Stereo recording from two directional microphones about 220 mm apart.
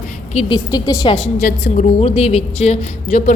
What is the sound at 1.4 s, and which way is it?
A woman's voice, 35° left (ahead or behind).